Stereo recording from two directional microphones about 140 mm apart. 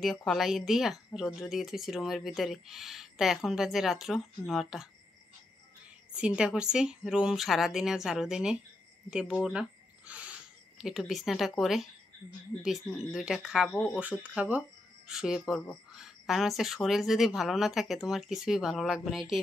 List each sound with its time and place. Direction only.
0.0 s speech: 5° left (ahead or behind)
6.1 s speech: 5° right (ahead or behind)
12.9 s speech: 5° right (ahead or behind)
13.7 s speech: 5° left (ahead or behind)
14.2 s speech: 10° right (ahead or behind)